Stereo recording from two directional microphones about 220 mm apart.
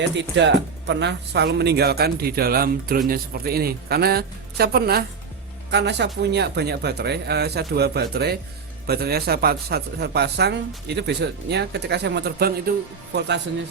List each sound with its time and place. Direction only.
0.2 s speech: 55° right (ahead or behind)